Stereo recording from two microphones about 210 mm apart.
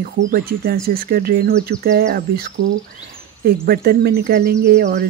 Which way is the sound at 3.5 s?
50° right (ahead or behind).